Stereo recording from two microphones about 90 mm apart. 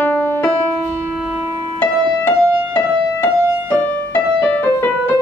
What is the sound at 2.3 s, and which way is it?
Music, 25° left (ahead or behind).